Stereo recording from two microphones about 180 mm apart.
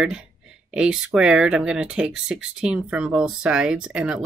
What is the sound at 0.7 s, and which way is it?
Speech, 5° right (ahead or behind).